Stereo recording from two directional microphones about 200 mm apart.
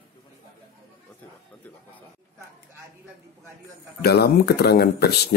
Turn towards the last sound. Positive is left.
turn(degrees=55)  # may be behind; listen again after turning